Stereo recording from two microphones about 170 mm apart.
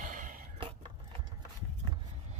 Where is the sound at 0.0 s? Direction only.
50° right (ahead or behind).